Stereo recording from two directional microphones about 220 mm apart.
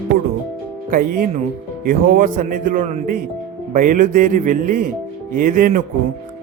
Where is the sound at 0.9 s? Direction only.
40° right (ahead or behind).